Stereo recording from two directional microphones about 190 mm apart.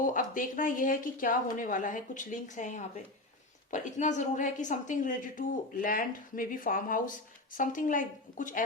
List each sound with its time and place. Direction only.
0.0 s a woman's voice: 45° left (ahead or behind)